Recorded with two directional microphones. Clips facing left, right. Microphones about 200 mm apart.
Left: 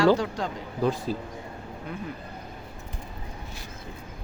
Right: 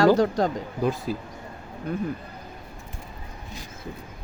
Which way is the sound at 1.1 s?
10° right (ahead or behind).